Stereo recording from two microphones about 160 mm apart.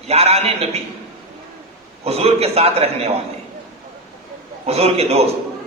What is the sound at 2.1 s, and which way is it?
A man's voice, 40° right (ahead or behind).